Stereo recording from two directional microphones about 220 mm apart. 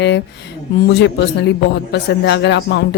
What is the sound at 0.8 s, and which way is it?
Speech, 50° left (ahead or behind).